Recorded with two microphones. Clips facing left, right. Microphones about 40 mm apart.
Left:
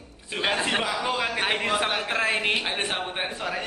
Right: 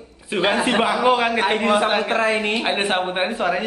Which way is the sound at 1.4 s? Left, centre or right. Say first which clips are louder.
Right 7 dB; centre.